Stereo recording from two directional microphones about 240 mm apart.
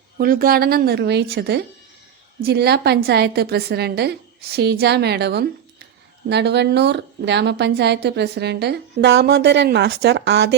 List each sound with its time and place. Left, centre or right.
0.2 s a woman's voice: right